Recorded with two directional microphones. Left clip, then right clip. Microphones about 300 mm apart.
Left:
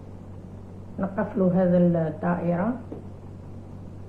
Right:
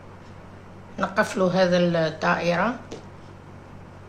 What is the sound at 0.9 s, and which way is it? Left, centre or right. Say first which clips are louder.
Speech: right 5 dB; right.